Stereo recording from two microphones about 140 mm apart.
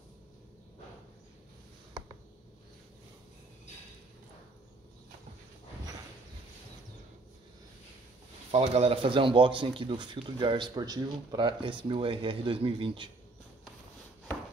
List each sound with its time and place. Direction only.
8.5 s speech: 45° right (ahead or behind)